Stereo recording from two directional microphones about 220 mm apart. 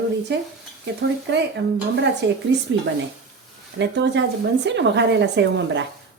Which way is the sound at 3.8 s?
55° right (ahead or behind).